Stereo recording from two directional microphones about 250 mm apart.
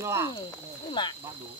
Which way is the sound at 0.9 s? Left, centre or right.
Centre.